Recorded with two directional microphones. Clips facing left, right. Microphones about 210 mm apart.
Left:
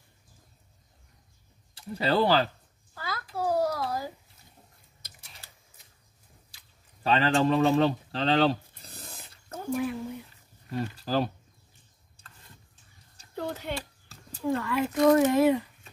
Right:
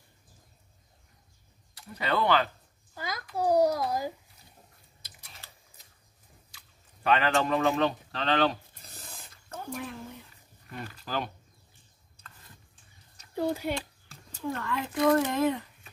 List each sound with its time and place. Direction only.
2.0 s speech: 30° left (ahead or behind)
2.9 s a sound: 15° right (ahead or behind)
7.0 s speech: 30° left (ahead or behind)
9.7 s speech: 5° left (ahead or behind)
10.7 s speech: 35° left (ahead or behind)
13.3 s speech: 10° right (ahead or behind)
14.6 s speech: 10° left (ahead or behind)